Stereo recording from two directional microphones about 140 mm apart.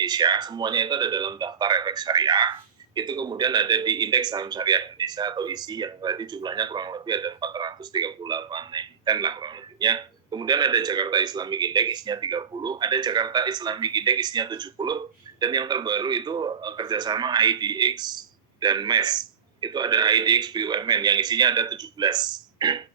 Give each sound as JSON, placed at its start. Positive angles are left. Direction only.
{"t": 0.0, "sound": "speech", "side_deg": -30}